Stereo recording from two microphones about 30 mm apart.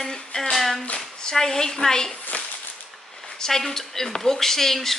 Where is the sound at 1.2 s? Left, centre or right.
Centre.